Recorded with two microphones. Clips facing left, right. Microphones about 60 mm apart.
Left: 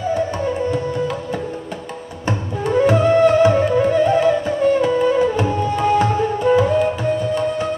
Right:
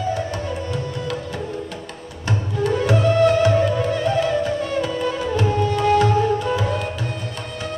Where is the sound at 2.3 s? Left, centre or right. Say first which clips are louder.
Left 1 dB; left.